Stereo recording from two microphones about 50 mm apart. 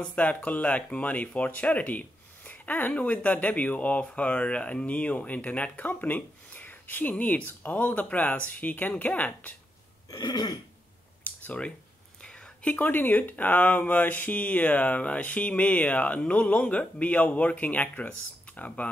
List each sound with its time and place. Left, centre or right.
0.0 s speech: left
11.2 s a sound: left
12.2 s whispering: centre
12.7 s speech: left